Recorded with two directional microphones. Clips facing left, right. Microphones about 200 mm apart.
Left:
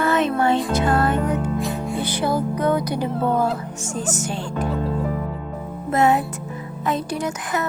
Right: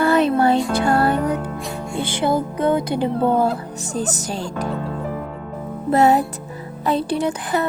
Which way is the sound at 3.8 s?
35° right (ahead or behind).